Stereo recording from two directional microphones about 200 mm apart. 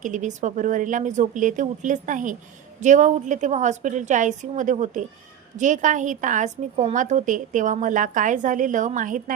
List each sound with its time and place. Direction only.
0.0 s a woman's voice: 40° right (ahead or behind)